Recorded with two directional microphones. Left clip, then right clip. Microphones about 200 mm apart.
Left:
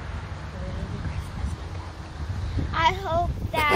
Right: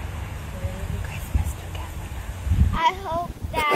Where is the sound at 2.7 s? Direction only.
20° left (ahead or behind).